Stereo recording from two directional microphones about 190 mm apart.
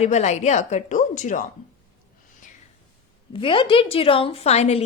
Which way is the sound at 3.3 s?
25° left (ahead or behind).